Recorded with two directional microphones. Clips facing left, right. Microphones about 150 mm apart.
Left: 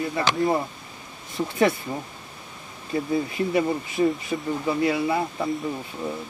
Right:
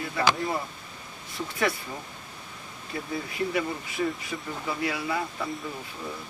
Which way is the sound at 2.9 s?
25° left (ahead or behind).